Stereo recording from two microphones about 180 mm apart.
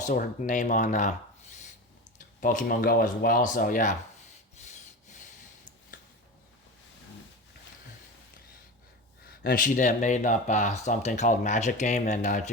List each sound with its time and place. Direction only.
0.0 s speech: 45° left (ahead or behind)
2.1 s speech: 45° left (ahead or behind)
4.5 s sawing: 40° left (ahead or behind)
9.2 s speech: 60° left (ahead or behind)